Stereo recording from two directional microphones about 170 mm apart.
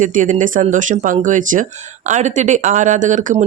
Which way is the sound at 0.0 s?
50° right (ahead or behind).